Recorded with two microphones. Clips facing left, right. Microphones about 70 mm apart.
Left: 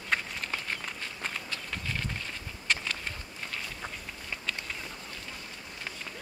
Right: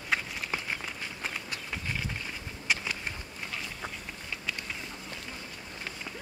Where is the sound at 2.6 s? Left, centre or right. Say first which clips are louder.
Even; centre.